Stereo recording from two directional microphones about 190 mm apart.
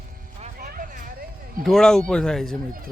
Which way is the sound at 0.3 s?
35° right (ahead or behind).